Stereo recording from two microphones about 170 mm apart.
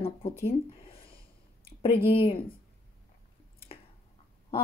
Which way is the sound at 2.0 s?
35° left (ahead or behind).